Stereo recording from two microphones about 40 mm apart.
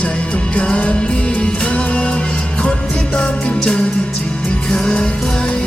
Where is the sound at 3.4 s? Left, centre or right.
Left.